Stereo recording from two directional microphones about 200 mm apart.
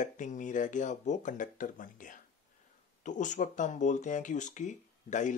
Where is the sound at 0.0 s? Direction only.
40° left (ahead or behind).